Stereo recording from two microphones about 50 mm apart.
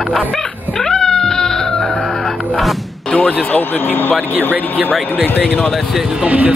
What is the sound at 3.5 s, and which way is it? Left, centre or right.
Speech, left.